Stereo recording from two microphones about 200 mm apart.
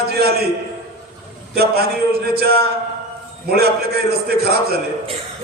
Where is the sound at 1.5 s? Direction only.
50° right (ahead or behind).